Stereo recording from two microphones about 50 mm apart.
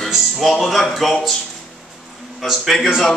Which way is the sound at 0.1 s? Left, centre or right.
Centre.